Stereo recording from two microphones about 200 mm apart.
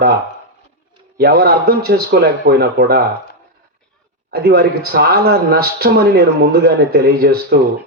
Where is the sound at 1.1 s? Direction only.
50° right (ahead or behind).